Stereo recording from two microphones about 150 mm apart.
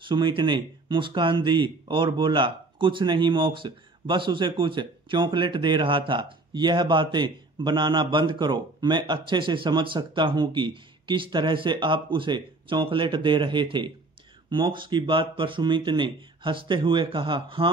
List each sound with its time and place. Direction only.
0.1 s speech: 30° right (ahead or behind)